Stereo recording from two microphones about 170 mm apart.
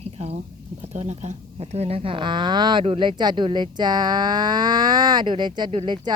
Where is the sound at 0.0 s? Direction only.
40° right (ahead or behind).